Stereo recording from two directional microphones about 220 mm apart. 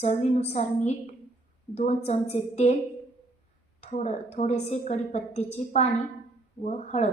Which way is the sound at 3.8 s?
30° left (ahead or behind).